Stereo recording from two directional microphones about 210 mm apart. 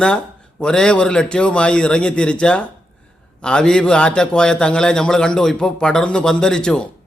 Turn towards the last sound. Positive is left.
turn(degrees=5)  # may be behind; listen again after turning